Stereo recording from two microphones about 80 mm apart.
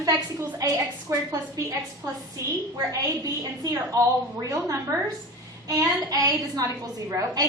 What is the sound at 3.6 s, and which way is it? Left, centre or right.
A woman's voice, right.